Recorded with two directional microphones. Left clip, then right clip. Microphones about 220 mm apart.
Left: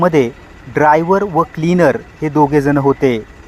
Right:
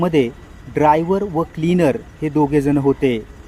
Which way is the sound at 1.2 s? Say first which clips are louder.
Left 6 dB; 15° left (ahead or behind).